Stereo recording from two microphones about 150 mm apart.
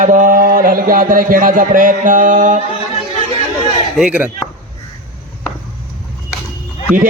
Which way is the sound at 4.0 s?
10° right (ahead or behind).